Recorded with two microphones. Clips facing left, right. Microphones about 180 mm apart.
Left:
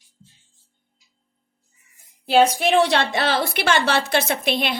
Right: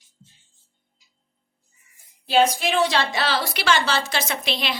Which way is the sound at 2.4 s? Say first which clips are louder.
Left 3 dB; 60° left (ahead or behind).